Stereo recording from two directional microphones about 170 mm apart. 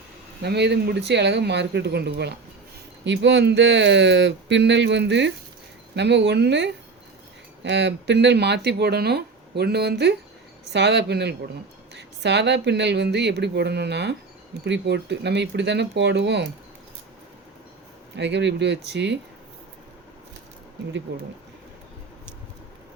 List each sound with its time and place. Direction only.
0.4 s speech: 80° right
3.0 s speech: 90° right
11.9 s speech: 90° right
18.2 s speech: 90° right
21.1 s speech: 90° right